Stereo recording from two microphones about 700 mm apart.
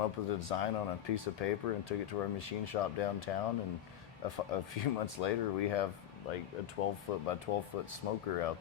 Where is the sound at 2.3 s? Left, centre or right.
Left.